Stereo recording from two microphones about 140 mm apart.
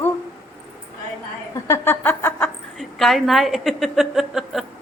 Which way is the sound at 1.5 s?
20° left (ahead or behind).